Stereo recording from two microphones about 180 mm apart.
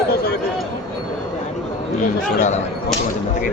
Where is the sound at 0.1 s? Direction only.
60° left (ahead or behind).